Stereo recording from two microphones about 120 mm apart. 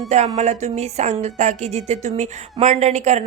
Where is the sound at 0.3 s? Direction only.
70° right (ahead or behind).